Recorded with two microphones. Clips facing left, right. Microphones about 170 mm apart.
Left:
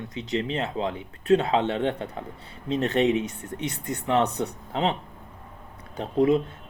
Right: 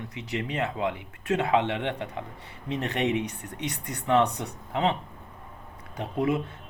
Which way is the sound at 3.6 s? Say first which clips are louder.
Left 2 dB; 25° left (ahead or behind).